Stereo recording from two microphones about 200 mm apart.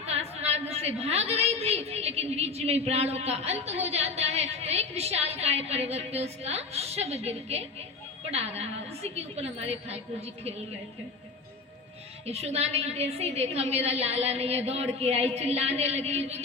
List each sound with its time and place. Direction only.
0.0 s a woman's voice: 30° right (ahead or behind)
12.2 s a woman's voice: 30° right (ahead or behind)